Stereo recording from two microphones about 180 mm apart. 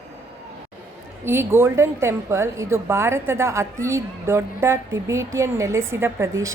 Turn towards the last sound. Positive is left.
turn(degrees=-15)  # may be behind; listen again after turning